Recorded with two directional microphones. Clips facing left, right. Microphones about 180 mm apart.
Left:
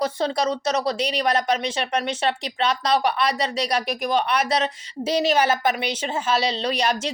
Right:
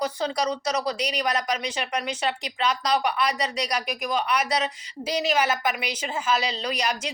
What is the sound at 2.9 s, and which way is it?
A woman's voice, 30° left (ahead or behind).